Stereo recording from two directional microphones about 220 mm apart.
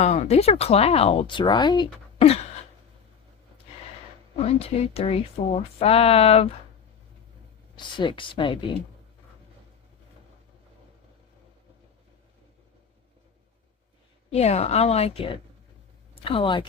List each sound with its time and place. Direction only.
0.0 s speech: 30° left (ahead or behind)
4.4 s speech: 30° left (ahead or behind)
7.8 s speech: 20° left (ahead or behind)
14.3 s speech: 30° left (ahead or behind)